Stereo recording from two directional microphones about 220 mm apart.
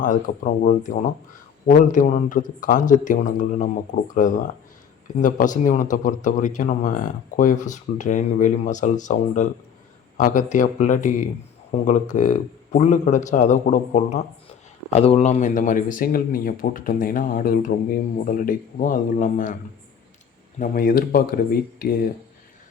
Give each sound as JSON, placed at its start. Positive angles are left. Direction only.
{"t": 0.0, "sound": "speech", "side_deg": 35}
{"t": 20.6, "sound": "speech", "side_deg": 40}